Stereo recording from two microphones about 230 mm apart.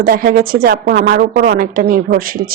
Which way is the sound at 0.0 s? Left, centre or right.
Right.